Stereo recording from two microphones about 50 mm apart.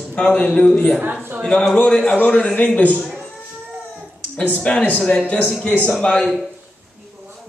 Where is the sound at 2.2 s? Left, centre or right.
Left.